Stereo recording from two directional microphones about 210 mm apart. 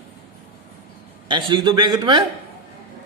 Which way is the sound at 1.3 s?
25° right (ahead or behind).